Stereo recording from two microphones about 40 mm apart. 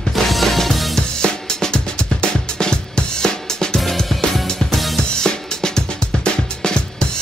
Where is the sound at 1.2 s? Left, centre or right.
Centre.